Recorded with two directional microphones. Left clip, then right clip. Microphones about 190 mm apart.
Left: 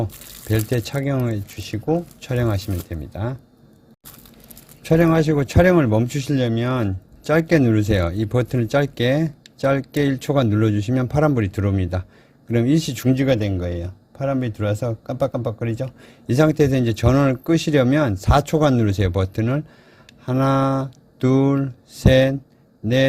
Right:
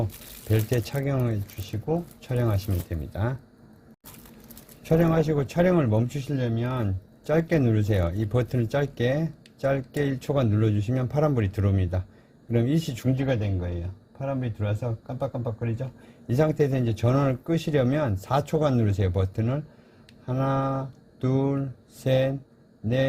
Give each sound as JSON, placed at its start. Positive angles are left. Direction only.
{"t": 0.0, "sound": "speech", "side_deg": 25}
{"t": 2.9, "sound": "speech", "side_deg": 20}
{"t": 4.8, "sound": "speech", "side_deg": 30}
{"t": 13.1, "sound": "speech", "side_deg": 45}
{"t": 16.3, "sound": "speech", "side_deg": 35}